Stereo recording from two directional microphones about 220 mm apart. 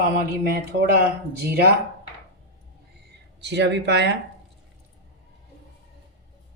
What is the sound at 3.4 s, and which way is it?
Speech, 50° right (ahead or behind).